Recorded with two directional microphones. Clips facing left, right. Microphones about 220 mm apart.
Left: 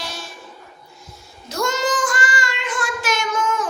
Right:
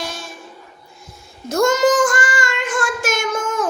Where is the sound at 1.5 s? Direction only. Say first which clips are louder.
Right 7 dB; 50° right (ahead or behind).